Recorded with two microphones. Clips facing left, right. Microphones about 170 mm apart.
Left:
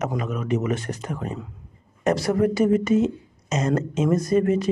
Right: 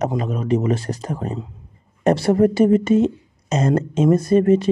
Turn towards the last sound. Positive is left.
turn(degrees=-30)  # may be behind; listen again after turning